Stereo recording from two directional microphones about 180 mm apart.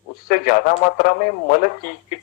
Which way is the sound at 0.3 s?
50° left (ahead or behind).